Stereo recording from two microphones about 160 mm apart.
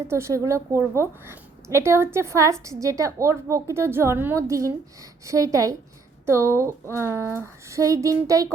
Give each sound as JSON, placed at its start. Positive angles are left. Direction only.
{"t": 0.1, "sound": "a woman's voice", "side_deg": -15}